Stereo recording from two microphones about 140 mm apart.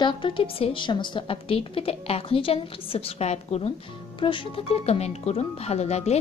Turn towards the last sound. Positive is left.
turn(degrees=50)  # may be behind; listen again after turning